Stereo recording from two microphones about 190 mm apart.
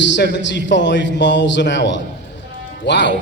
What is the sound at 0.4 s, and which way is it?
A man's voice, 70° left (ahead or behind).